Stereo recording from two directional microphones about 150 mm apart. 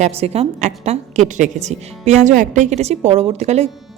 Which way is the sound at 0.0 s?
40° right (ahead or behind).